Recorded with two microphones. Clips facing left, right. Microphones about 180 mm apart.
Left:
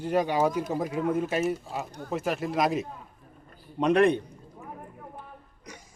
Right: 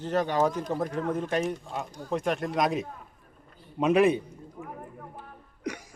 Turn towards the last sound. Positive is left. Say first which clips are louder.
# right 12 dB
turn(degrees=-70)  # may be behind; listen again after turning